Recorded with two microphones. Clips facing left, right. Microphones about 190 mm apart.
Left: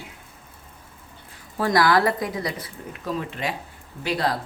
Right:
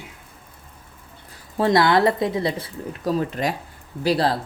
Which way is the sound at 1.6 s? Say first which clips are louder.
Right 3 dB; 25° right (ahead or behind).